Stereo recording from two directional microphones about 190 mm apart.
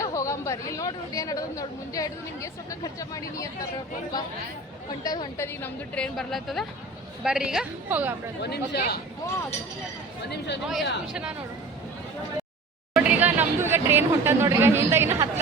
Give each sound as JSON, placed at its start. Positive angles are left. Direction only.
{"t": 0.0, "sound": "speech", "side_deg": 15}
{"t": 5.0, "sound": "a woman's voice", "side_deg": 20}
{"t": 5.6, "sound": "a woman's voice", "side_deg": 5}
{"t": 8.4, "sound": "speech", "side_deg": 60}
{"t": 10.2, "sound": "speech", "side_deg": 65}
{"t": 10.7, "sound": "a woman's voice", "side_deg": 0}
{"t": 12.9, "sound": "speech", "side_deg": -5}